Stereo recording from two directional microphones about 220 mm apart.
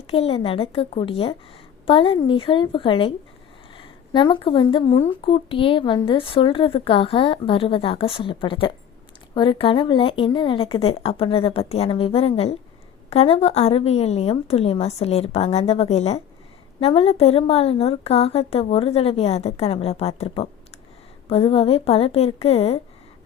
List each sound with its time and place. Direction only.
0.1 s speech: 25° left (ahead or behind)